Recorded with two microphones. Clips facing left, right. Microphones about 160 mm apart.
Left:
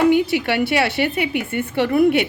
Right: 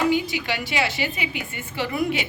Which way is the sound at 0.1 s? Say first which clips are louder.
Left 7 dB; 65° left (ahead or behind).